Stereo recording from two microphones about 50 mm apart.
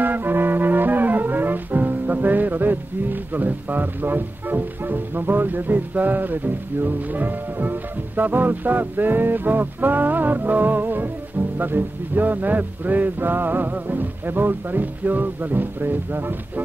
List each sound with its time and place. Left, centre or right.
0.0 s music: right